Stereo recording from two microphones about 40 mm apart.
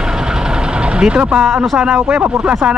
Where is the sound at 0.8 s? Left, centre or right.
Right.